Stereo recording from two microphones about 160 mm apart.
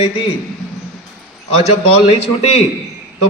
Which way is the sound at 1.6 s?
40° left (ahead or behind).